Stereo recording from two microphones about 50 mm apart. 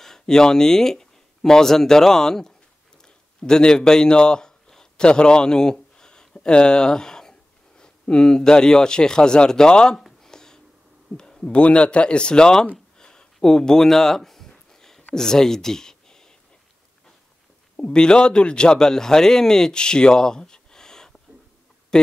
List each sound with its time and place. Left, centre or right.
0.0 s a man's voice: centre
9.9 s a sound: centre
11.1 s heart sounds: centre
11.6 s speech: left
13.0 s a sound: centre
15.1 s speech: centre
17.7 s a man's voice: centre